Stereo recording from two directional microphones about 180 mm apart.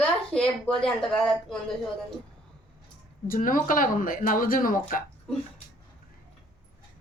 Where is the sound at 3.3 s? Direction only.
50° left (ahead or behind).